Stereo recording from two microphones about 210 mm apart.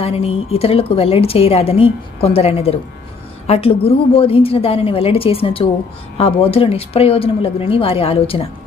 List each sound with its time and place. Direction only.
0.0 s a woman's voice: 30° left (ahead or behind)